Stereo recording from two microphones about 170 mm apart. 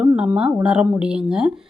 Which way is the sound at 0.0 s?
10° right (ahead or behind).